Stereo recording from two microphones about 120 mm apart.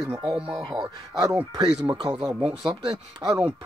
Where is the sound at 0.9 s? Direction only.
35° right (ahead or behind).